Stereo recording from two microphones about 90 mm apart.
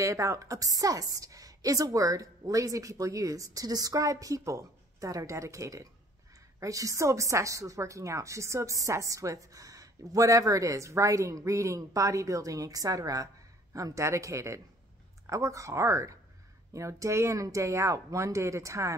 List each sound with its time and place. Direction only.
0.0 s a woman's voice: 35° right (ahead or behind)